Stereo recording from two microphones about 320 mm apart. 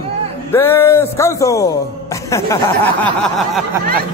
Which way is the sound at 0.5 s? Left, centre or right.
Centre.